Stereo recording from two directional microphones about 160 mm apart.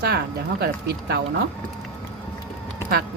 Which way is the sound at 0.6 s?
80° right.